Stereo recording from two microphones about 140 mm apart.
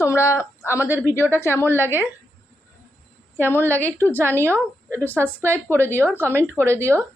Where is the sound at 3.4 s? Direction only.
15° left (ahead or behind).